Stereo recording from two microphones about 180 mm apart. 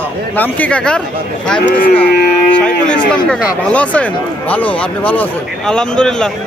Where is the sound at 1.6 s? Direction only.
50° left (ahead or behind).